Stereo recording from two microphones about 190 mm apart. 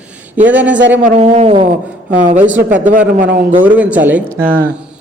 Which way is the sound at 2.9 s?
45° right (ahead or behind).